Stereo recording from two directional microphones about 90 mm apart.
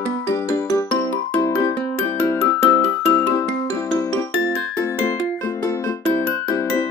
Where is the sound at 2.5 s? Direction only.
20° left (ahead or behind).